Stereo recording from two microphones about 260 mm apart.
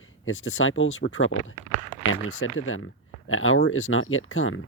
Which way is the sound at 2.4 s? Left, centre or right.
Left.